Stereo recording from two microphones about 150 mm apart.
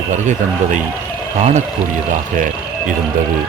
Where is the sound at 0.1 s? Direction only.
55° right (ahead or behind).